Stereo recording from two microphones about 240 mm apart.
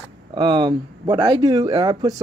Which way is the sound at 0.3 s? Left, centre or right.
Centre.